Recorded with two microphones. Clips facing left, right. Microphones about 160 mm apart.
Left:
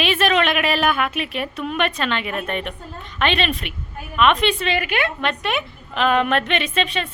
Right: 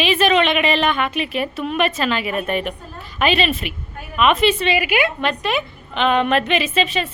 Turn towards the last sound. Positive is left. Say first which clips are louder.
# right 3 dB
turn(degrees=0)  # may be behind; listen again after turning